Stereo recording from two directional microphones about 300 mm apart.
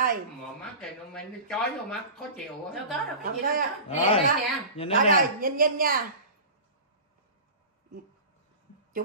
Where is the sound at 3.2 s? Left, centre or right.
Right.